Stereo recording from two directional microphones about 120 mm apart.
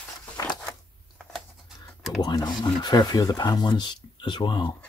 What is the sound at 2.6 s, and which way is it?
Speech, 35° left (ahead or behind).